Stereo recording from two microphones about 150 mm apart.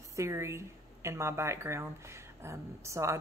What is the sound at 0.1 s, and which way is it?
A woman's voice, 20° right (ahead or behind).